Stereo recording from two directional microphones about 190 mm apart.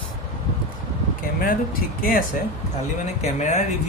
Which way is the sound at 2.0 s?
45° left (ahead or behind).